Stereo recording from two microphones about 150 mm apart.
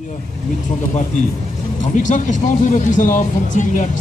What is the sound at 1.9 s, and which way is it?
Speech, 55° left (ahead or behind).